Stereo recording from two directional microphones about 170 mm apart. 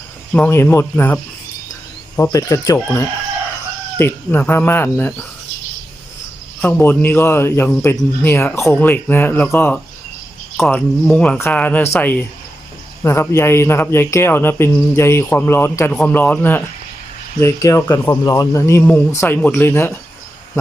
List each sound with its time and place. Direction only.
0.3 s speech: 10° left (ahead or behind)
6.6 s speech: 10° left (ahead or behind)
13.0 s speech: 15° left (ahead or behind)